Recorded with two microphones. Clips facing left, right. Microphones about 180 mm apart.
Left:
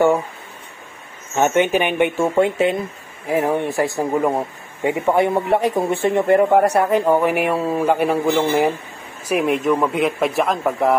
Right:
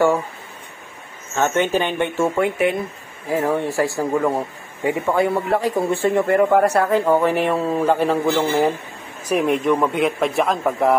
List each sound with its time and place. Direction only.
1.3 s a man's voice: 15° left (ahead or behind)
9.3 s speech: centre (ahead or behind)